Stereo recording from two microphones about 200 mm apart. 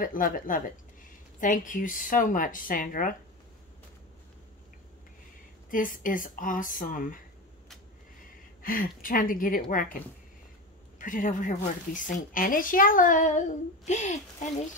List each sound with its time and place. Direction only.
0.0 s a woman's voice: 45° left (ahead or behind)
5.7 s speech: 40° left (ahead or behind)
8.6 s speech: 45° left (ahead or behind)
11.0 s a woman's voice: 40° left (ahead or behind)